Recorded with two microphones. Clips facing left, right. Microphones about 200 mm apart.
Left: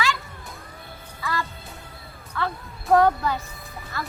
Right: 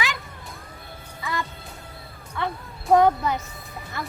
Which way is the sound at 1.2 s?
20° right (ahead or behind).